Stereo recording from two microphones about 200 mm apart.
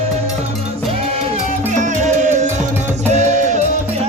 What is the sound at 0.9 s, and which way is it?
Music, 30° right (ahead or behind).